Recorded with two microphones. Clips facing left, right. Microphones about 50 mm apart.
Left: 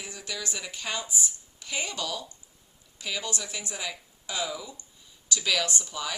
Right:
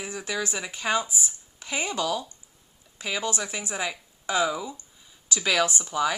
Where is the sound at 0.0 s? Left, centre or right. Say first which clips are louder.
Right 7 dB; right.